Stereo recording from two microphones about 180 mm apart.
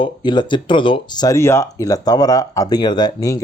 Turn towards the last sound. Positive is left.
turn(degrees=20)  # may be behind; listen again after turning